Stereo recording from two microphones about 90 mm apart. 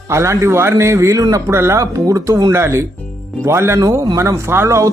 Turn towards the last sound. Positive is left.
turn(degrees=-30)  # may be behind; listen again after turning